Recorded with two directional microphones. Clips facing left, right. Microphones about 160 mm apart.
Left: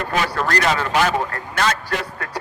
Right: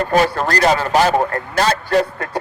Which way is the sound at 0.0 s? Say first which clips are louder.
Right 6 dB; 40° right (ahead or behind).